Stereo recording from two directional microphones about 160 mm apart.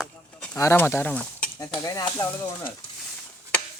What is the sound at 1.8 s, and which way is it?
Speech, 20° left (ahead or behind).